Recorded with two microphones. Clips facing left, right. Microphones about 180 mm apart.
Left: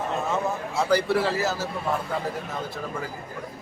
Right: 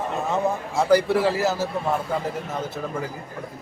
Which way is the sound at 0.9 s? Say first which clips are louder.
Right 4 dB; 15° right (ahead or behind).